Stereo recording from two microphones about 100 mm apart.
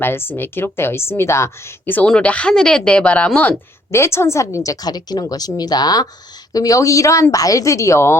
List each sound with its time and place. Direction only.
0.0 s a woman's voice: 20° left (ahead or behind)
1.9 s speech: 15° left (ahead or behind)
3.9 s a woman's voice: 25° left (ahead or behind)